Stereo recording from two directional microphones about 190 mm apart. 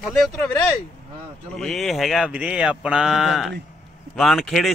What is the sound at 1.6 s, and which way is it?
Speech, centre (ahead or behind).